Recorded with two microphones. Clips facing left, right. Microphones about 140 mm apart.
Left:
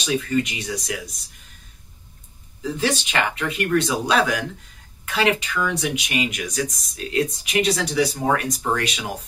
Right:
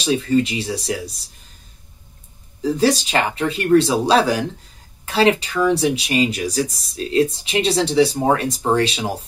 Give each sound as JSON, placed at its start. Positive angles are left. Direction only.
{"t": 0.0, "sound": "speech", "side_deg": -30}
{"t": 2.6, "sound": "speech", "side_deg": -35}